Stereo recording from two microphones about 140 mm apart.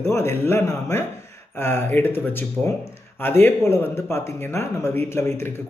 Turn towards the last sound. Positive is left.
turn(degrees=15)  # may be behind; listen again after turning